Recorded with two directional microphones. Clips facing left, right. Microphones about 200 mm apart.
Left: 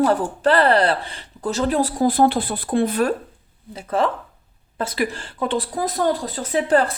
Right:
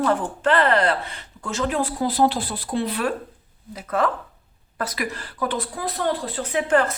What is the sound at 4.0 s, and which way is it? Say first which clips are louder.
Speech: left 1 dB; 30° left (ahead or behind).